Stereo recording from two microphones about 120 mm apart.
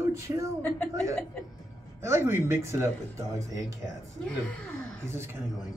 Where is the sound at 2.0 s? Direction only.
20° right (ahead or behind).